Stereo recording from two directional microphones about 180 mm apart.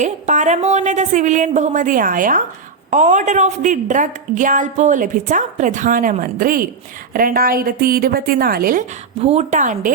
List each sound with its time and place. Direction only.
0.0 s a woman's voice: 40° right (ahead or behind)
9.2 s a woman's voice: 40° right (ahead or behind)